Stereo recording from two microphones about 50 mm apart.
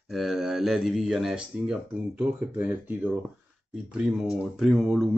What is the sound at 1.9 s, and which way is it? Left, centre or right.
Speech, right.